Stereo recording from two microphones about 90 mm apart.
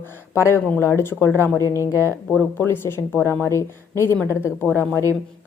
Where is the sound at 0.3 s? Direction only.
30° left (ahead or behind).